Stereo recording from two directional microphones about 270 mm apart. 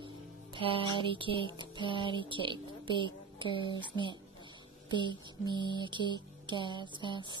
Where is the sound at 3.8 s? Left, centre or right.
Centre.